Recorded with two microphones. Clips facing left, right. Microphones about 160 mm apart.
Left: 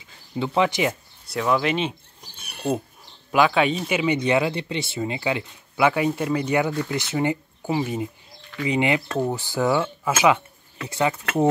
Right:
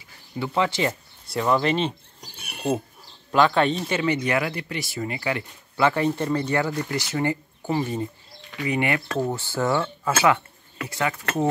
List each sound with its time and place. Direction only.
0.4 s speech: 15° left (ahead or behind)
1.2 s speech: centre (ahead or behind)
2.3 s mechanisms: 10° right (ahead or behind)
3.3 s speech: 10° left (ahead or behind); by 11.4 s 25° left (ahead or behind)